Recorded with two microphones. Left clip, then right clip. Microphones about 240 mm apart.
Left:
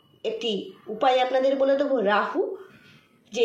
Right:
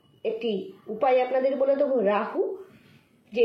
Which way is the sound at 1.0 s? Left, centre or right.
Left.